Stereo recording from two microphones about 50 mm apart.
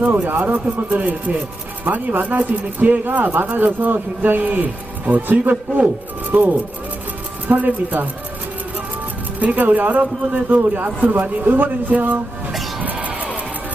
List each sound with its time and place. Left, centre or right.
0.1 s speech: right
9.4 s speech: right
12.8 s music: right